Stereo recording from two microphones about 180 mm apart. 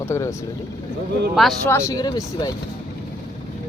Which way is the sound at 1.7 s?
15° left (ahead or behind).